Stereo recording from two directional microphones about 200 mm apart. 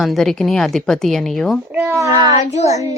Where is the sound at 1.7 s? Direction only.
10° right (ahead or behind).